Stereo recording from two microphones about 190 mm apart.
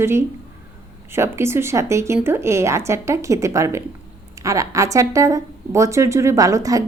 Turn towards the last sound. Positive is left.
turn(degrees=-15)  # may be behind; listen again after turning